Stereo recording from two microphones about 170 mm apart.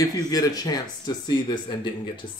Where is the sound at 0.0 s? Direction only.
20° left (ahead or behind).